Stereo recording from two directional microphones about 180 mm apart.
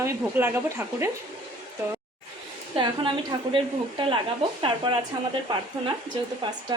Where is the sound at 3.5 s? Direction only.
30° right (ahead or behind).